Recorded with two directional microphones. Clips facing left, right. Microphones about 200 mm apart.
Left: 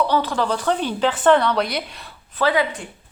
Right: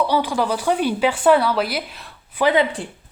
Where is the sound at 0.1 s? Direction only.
10° right (ahead or behind).